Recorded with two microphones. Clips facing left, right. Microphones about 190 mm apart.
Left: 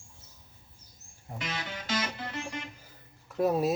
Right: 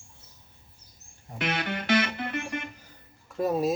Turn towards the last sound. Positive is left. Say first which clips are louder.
# even
turn(degrees=0)  # may be behind; listen again after turning